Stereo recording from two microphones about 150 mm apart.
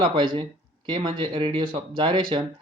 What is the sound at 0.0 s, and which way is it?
Speech, 30° right (ahead or behind).